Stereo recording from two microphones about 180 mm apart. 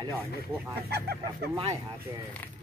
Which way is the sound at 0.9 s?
65° right (ahead or behind).